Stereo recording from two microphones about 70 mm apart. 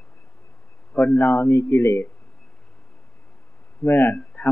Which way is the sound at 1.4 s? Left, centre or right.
Left.